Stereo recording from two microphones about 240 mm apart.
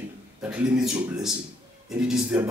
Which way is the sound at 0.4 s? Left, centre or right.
Centre.